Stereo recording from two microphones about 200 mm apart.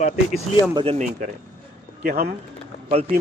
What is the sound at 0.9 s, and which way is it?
Speech, 40° right (ahead or behind).